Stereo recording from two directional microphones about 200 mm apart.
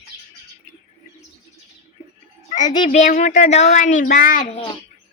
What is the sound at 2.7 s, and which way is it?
Speech, 30° left (ahead or behind).